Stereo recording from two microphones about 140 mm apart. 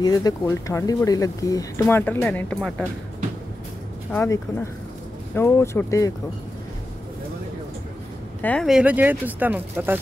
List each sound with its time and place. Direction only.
0.0 s speech: 25° left (ahead or behind); by 2.9 s 5° left (ahead or behind)
4.1 s speech: 15° left (ahead or behind)
8.4 s speech: 10° left (ahead or behind)
8.6 s speech: 10° right (ahead or behind)